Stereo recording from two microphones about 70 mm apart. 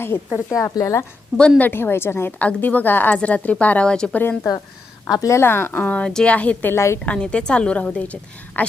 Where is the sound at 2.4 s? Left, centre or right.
Left.